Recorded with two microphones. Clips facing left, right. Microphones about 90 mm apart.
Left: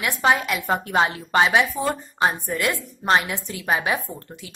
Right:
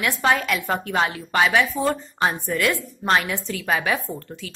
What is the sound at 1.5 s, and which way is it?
A woman's voice, 20° left (ahead or behind).